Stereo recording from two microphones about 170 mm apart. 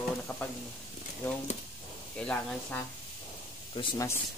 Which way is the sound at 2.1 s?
5° left (ahead or behind).